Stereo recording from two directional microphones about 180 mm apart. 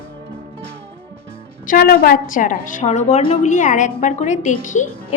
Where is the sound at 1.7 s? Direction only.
55° left (ahead or behind).